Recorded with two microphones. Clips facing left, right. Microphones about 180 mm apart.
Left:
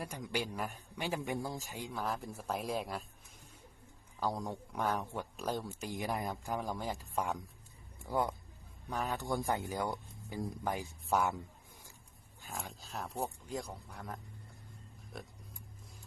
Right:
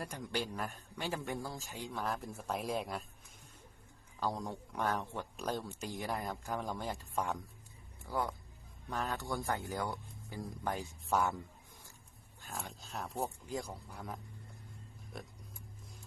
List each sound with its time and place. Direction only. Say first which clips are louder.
0.2 s a man's voice: left 1 dB; 10° left (ahead or behind)
1.9 s speech: even; centre (ahead or behind)
4.2 s a man's voice: left 1 dB; 10° left (ahead or behind)
6.6 s a man's voice: left 1 dB; centre (ahead or behind)
12.5 s speech: even; centre (ahead or behind)